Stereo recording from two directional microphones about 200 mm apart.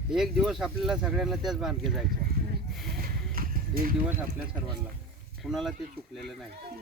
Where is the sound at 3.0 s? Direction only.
45° right (ahead or behind).